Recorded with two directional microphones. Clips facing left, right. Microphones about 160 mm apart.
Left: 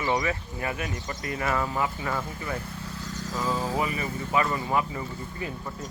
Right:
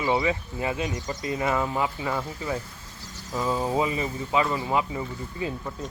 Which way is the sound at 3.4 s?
20° right (ahead or behind).